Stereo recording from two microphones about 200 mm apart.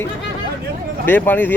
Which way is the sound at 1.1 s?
10° left (ahead or behind).